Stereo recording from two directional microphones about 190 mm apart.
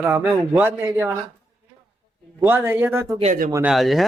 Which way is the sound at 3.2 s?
40° right (ahead or behind).